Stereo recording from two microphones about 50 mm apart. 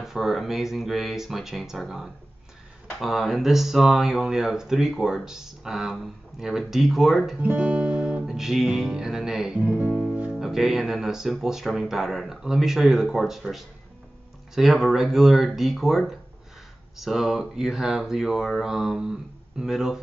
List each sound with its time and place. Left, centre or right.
0.0 s speech: centre
7.4 s guitar: right
8.3 s speech: centre